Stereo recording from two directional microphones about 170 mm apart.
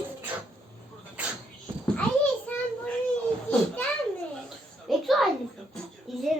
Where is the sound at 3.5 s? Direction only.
5° left (ahead or behind).